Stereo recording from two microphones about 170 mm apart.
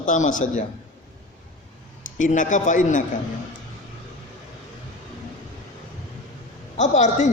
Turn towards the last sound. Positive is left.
turn(degrees=45)  # may be behind; listen again after turning